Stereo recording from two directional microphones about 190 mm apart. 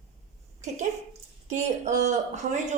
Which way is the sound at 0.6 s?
40° right (ahead or behind).